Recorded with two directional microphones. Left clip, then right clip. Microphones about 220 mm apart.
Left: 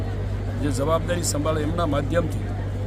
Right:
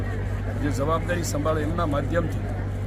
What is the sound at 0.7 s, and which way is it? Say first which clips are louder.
Speech: left 2 dB; 10° left (ahead or behind).